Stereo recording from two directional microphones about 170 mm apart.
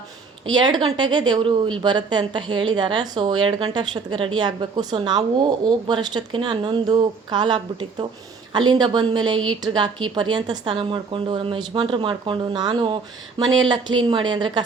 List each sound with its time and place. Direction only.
0.4 s a woman's voice: 25° right (ahead or behind)